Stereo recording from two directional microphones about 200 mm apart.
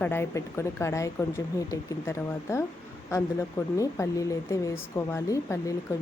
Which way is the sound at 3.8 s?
15° left (ahead or behind).